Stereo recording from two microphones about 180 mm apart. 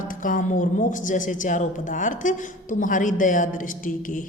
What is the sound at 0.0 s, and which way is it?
A woman's voice, 50° left (ahead or behind).